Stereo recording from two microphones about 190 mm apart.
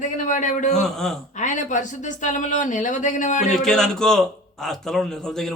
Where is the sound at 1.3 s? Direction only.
40° left (ahead or behind).